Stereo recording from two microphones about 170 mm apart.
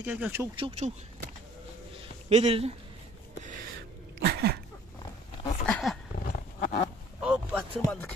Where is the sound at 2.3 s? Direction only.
40° right (ahead or behind).